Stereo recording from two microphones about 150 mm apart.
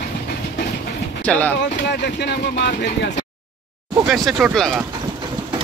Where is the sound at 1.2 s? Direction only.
10° left (ahead or behind).